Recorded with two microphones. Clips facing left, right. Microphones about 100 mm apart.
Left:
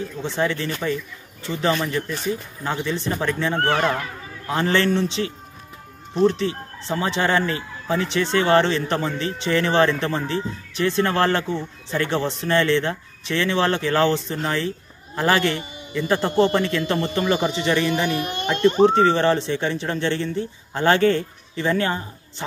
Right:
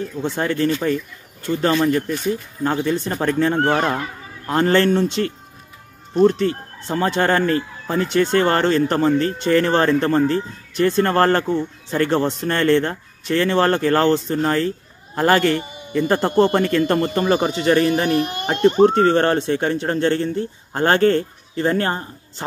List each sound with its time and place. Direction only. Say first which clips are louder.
0.2 s speech: right 4 dB; 45° right (ahead or behind)